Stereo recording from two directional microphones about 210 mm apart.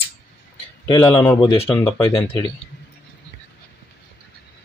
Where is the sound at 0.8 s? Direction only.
15° left (ahead or behind).